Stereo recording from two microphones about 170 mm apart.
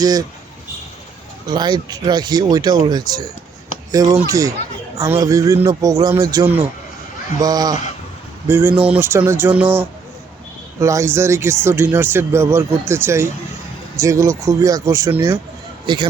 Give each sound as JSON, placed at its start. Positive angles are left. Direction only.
{"t": 0.0, "sound": "speech", "side_deg": -20}
{"t": 1.5, "sound": "speech", "side_deg": -25}
{"t": 8.4, "sound": "speech", "side_deg": -10}
{"t": 15.9, "sound": "speech", "side_deg": -30}